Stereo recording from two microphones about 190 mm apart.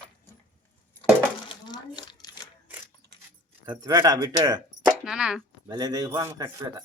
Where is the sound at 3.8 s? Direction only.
20° right (ahead or behind).